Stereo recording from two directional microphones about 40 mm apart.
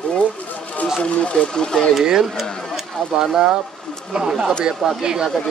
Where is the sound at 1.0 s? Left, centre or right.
Left.